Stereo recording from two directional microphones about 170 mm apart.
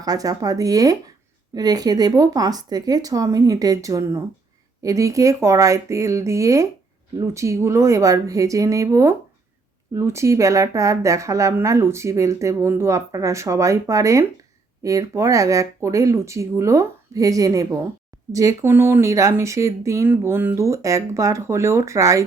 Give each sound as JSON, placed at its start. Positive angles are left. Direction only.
{"t": 0.0, "sound": "speech", "side_deg": -20}